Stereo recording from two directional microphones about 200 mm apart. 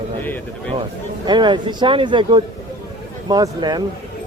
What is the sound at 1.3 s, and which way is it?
A man's voice, 20° right (ahead or behind).